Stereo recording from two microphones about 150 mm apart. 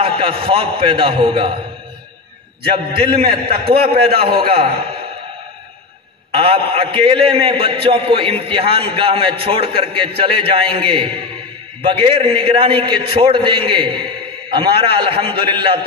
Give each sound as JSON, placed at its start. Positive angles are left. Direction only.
{"t": 0.0, "sound": "a man's voice", "side_deg": -40}
{"t": 3.0, "sound": "a man's voice", "side_deg": -35}
{"t": 3.4, "sound": "a man's voice", "side_deg": -90}
{"t": 4.4, "sound": "a man's voice", "side_deg": -40}
{"t": 6.4, "sound": "a man's voice", "side_deg": -40}